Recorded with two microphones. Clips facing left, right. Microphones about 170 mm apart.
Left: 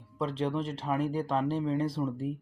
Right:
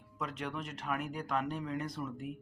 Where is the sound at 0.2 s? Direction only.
30° left (ahead or behind).